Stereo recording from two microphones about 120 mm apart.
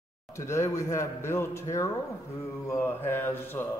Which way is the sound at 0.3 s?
25° left (ahead or behind).